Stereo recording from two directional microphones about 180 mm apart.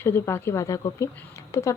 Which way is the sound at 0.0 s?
15° left (ahead or behind).